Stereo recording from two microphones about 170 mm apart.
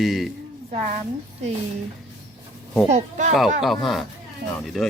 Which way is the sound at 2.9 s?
45° right (ahead or behind).